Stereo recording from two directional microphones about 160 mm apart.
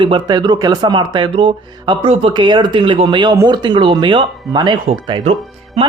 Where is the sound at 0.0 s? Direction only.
30° right (ahead or behind).